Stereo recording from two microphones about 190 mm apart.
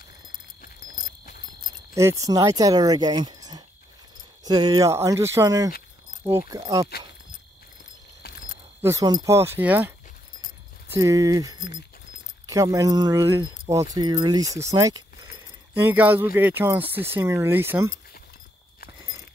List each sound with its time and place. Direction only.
2.0 s speech: 15° right (ahead or behind)
8.2 s a sound: 55° left (ahead or behind)
8.8 s speech: 20° right (ahead or behind)